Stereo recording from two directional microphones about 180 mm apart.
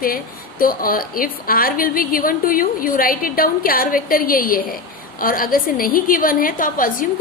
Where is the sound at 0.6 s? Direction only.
50° left (ahead or behind).